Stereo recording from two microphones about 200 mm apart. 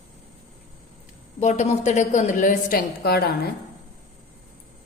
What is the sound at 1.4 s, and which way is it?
A woman's voice, 35° left (ahead or behind).